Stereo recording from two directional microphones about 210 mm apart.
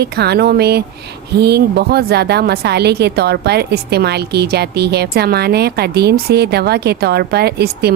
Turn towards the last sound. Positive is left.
turn(degrees=-50)  # may be behind; listen again after turning